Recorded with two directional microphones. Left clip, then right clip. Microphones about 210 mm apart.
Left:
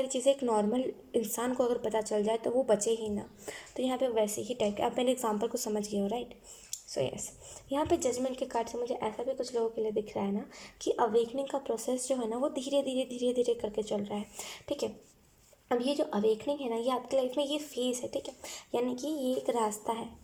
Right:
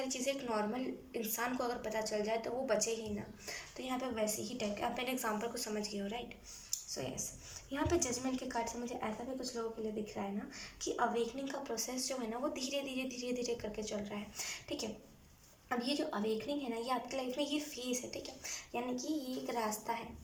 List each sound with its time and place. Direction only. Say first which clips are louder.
0.1 s a woman's voice: left 9 dB; 35° left (ahead or behind)
6.7 s a sound: left 8 dB; 40° left (ahead or behind)
7.7 s a woman's voice: left 6 dB; 35° left (ahead or behind)